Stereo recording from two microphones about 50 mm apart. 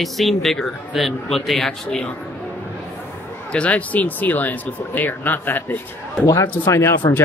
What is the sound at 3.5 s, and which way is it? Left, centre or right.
Speech, left.